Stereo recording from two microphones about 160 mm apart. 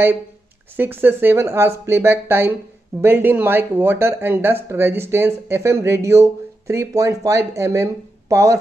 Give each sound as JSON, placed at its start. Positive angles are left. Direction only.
{"t": 0.7, "sound": "speech", "side_deg": -10}